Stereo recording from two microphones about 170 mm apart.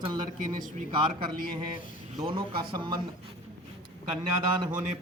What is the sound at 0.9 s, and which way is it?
A man's voice, 25° right (ahead or behind).